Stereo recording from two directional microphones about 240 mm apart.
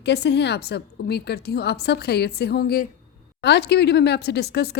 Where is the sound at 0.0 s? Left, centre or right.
Left.